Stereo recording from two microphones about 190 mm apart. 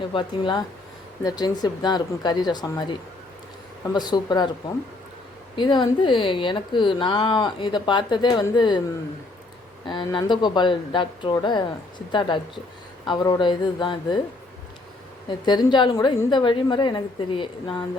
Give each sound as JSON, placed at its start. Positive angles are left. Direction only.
{"t": 0.1, "sound": "speech", "side_deg": 25}
{"t": 3.9, "sound": "speech", "side_deg": 20}
{"t": 9.8, "sound": "speech", "side_deg": 25}
{"t": 15.4, "sound": "speech", "side_deg": 25}